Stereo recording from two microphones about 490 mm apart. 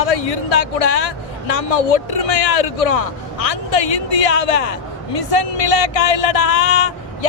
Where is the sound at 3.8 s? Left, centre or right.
Left.